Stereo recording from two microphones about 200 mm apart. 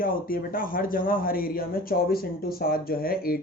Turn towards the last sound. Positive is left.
turn(degrees=50)  # may be behind; listen again after turning